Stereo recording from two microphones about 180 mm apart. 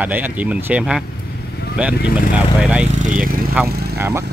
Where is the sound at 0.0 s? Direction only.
10° right (ahead or behind).